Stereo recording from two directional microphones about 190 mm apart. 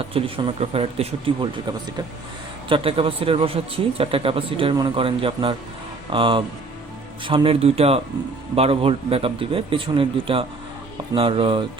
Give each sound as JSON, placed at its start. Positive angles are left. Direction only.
{"t": 0.1, "sound": "a man's voice", "side_deg": -30}